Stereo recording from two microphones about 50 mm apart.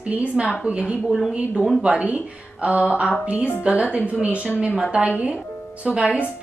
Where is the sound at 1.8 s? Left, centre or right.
Right.